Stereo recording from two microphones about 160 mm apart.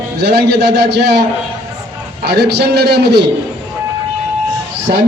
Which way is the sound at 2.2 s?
90° right.